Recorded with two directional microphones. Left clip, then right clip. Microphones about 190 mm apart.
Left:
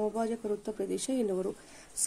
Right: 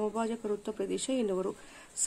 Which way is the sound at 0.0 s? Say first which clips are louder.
Left 1 dB; 10° left (ahead or behind).